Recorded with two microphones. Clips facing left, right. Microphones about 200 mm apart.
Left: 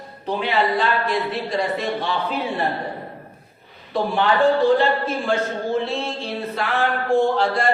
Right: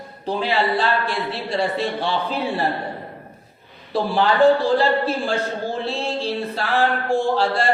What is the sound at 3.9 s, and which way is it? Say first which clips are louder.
A man's voice: right 1 dB; 30° right (ahead or behind).